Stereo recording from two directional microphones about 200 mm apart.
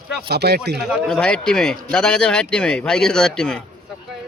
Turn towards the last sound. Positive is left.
turn(degrees=5)  # may be behind; listen again after turning